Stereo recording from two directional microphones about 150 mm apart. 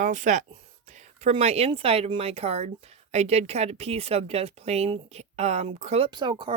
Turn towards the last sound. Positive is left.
turn(degrees=-30)  # may be behind; listen again after turning